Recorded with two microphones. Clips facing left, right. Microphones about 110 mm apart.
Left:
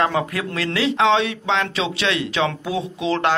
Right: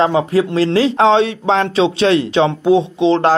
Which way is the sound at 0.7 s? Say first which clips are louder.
Right 5 dB; 35° right (ahead or behind).